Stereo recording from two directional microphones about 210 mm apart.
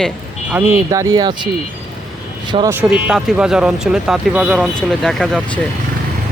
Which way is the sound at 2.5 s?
20° right (ahead or behind).